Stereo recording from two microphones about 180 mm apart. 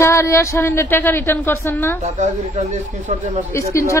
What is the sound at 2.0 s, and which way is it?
Speech, 40° right (ahead or behind).